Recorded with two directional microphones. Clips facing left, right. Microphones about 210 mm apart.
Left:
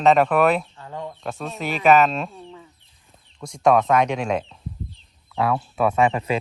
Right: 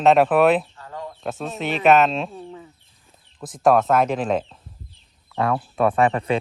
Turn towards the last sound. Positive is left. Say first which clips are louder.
# right 1 dB
turn(degrees=0)  # may be behind; listen again after turning